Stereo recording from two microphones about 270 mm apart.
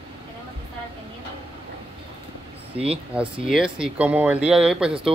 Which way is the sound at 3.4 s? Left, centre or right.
Centre.